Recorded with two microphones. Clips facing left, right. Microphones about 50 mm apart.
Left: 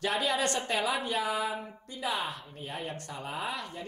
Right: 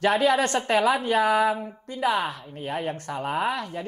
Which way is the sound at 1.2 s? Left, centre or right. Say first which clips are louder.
Right 10 dB; right.